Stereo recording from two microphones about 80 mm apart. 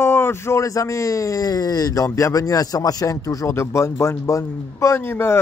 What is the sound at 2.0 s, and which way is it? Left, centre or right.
Speech, left.